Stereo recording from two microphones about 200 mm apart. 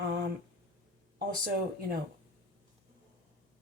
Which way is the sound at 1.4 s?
50° right (ahead or behind).